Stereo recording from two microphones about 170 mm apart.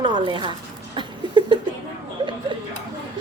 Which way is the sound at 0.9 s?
25° right (ahead or behind).